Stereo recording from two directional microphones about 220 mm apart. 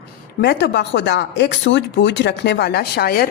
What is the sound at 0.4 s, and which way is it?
A woman's voice, 50° left (ahead or behind).